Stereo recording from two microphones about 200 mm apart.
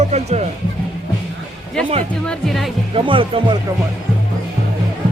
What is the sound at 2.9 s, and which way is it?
Speech, 25° right (ahead or behind).